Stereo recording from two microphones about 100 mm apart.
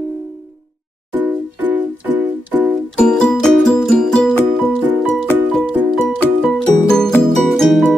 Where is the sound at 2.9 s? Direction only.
10° left (ahead or behind).